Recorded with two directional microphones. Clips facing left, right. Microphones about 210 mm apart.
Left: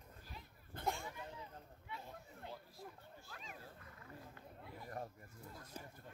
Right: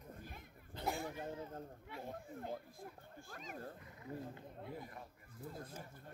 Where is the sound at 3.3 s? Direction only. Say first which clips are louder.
Right 8 dB; 45° right (ahead or behind).